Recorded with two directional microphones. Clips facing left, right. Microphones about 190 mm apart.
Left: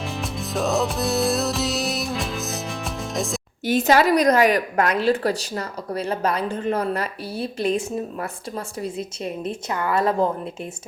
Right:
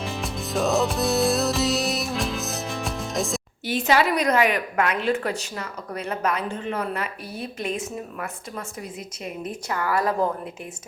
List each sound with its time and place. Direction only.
0.0 s music: centre (ahead or behind)
3.7 s a woman's voice: 45° left (ahead or behind); by 10.2 s 25° left (ahead or behind)